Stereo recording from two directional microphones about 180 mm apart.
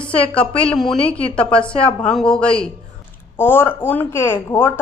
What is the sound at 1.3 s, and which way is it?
A woman's voice, 5° left (ahead or behind).